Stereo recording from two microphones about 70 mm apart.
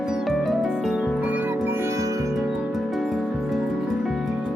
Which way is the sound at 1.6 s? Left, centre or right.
Right.